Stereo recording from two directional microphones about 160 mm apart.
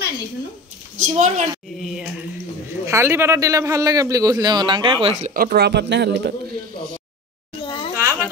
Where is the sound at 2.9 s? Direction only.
15° right (ahead or behind).